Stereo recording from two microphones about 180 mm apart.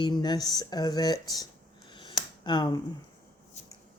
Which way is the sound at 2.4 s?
25° left (ahead or behind).